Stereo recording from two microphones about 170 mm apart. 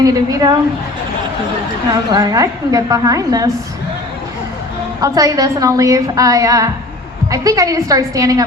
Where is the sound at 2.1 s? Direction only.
20° right (ahead or behind).